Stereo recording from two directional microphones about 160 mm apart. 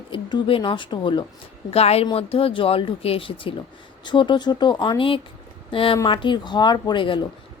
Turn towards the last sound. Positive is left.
turn(degrees=30)  # may be behind; listen again after turning